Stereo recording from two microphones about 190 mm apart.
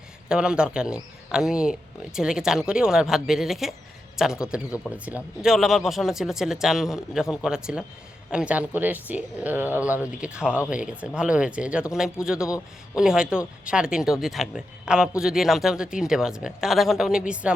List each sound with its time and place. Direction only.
0.3 s speech: 5° right (ahead or behind)
12.5 s a man's voice: 15° left (ahead or behind)
13.0 s speech: 5° right (ahead or behind)